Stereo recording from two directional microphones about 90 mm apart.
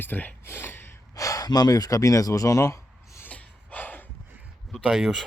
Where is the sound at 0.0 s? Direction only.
20° left (ahead or behind).